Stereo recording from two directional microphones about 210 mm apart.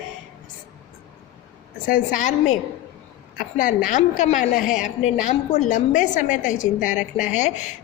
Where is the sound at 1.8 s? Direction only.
40° left (ahead or behind).